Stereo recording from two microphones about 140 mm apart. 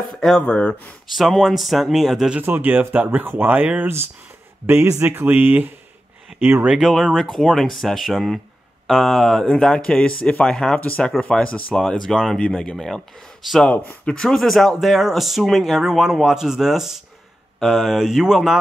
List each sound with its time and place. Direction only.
0.1 s speech: 5° left (ahead or behind)